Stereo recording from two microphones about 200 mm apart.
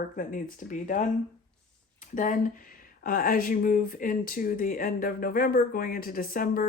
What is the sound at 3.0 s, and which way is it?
Speech, 45° left (ahead or behind).